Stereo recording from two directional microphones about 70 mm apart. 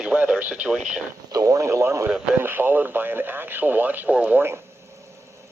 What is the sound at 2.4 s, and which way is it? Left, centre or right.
Speech, right.